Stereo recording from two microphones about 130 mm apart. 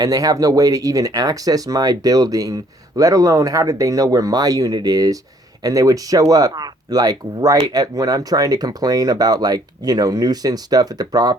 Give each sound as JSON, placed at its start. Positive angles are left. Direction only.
{"t": 0.0, "sound": "speech", "side_deg": -30}